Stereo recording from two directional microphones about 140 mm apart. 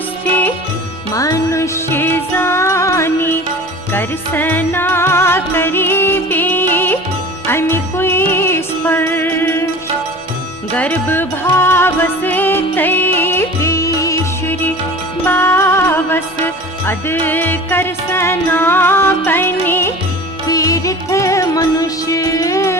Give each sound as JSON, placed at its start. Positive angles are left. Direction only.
{"t": 1.1, "sound": "music", "side_deg": 25}
{"t": 10.8, "sound": "music", "side_deg": 10}